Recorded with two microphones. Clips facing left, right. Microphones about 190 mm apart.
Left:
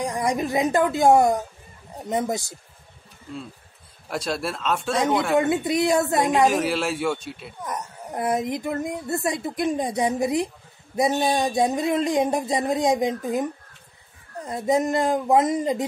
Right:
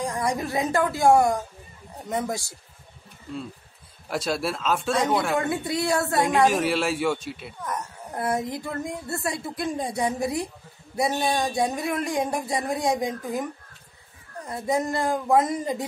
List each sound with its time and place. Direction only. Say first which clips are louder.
0.0 s a child's voice: left 2 dB; 20° left (ahead or behind)
4.1 s speech: right 1 dB; centre (ahead or behind)
5.4 s a child's voice: left 5 dB; 20° left (ahead or behind)
6.2 s speech: left 1 dB; centre (ahead or behind)
7.6 s a child's voice: left 1 dB; 20° left (ahead or behind)